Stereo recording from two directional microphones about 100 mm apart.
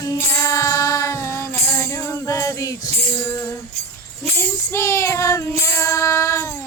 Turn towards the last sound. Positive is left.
turn(degrees=30)  # may be behind; listen again after turning